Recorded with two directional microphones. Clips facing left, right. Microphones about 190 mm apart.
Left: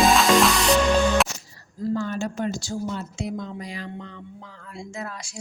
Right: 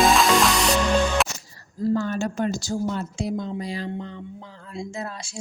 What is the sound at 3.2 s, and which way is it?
A woman's voice, 35° right (ahead or behind).